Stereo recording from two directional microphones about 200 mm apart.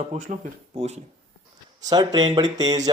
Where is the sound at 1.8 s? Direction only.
20° right (ahead or behind).